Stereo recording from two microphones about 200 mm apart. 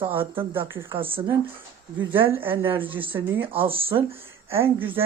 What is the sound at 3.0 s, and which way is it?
Speech, 25° right (ahead or behind).